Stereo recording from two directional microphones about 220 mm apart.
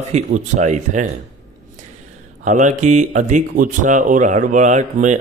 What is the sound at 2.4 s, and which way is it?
Speech, 35° right (ahead or behind).